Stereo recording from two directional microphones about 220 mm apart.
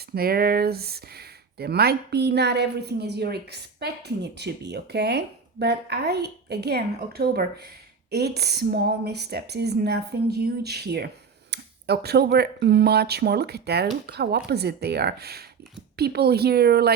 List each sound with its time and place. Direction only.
0.1 s speech: 45° right (ahead or behind)